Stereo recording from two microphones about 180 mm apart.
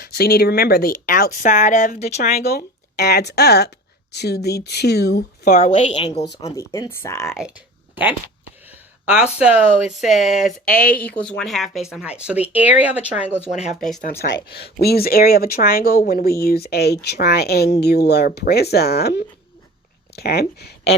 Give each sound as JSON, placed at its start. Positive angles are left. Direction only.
{"t": 0.0, "sound": "speech", "side_deg": 60}
{"t": 2.2, "sound": "speech", "side_deg": 55}
{"t": 5.5, "sound": "a woman's voice", "side_deg": 40}
{"t": 6.4, "sound": "speech", "side_deg": 15}
{"t": 8.6, "sound": "a sound", "side_deg": -10}
{"t": 9.4, "sound": "speech", "side_deg": -5}
{"t": 10.2, "sound": "speech", "side_deg": 40}
{"t": 11.1, "sound": "speech", "side_deg": 5}
{"t": 14.4, "sound": "speech", "side_deg": 60}